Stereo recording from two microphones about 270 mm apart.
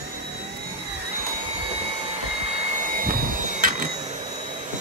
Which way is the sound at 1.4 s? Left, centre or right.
Right.